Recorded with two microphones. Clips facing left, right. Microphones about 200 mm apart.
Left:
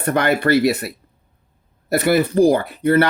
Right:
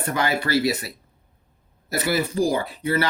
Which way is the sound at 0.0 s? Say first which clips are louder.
Left 6 dB; 60° left (ahead or behind).